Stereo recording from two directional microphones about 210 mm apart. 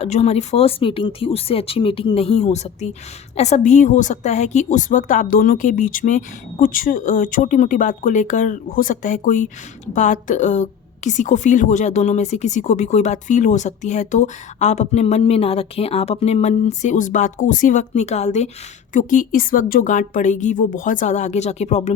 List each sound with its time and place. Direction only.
0.0 s a woman's voice: 30° left (ahead or behind)